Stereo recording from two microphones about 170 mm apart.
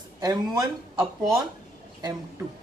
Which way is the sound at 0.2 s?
20° right (ahead or behind).